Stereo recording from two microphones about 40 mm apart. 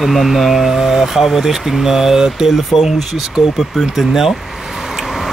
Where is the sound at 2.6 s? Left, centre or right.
Centre.